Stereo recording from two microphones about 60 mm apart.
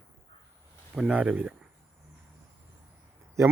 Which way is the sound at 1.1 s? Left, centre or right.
Right.